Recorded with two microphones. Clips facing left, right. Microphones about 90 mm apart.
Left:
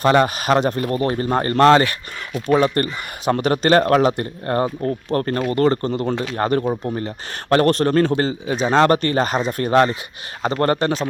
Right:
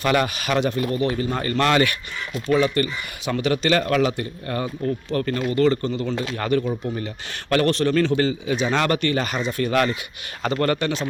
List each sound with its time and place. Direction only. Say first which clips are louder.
0.0 s a man's voice: left 5 dB; 35° left (ahead or behind)
2.5 s a man's voice: left 3 dB; 45° left (ahead or behind)